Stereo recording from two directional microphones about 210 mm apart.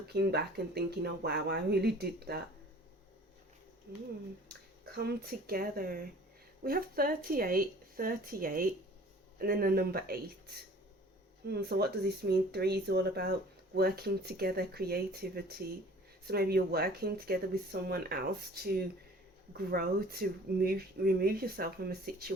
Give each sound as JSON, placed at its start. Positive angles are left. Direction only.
{"t": 0.1, "sound": "speech", "side_deg": -50}
{"t": 4.4, "sound": "speech", "side_deg": -50}